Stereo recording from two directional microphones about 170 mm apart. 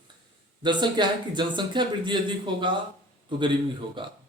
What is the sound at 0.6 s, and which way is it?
Speech, 25° right (ahead or behind).